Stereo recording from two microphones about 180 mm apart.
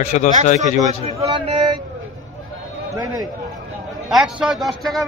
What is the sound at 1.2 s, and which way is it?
Speech, 30° right (ahead or behind).